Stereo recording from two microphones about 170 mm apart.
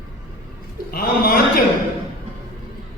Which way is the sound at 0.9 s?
60° left (ahead or behind).